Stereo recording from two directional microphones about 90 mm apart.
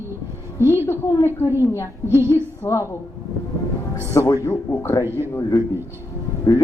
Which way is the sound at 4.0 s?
25° left (ahead or behind).